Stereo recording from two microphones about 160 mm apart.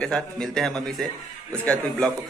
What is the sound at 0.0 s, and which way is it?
Speech, 5° left (ahead or behind).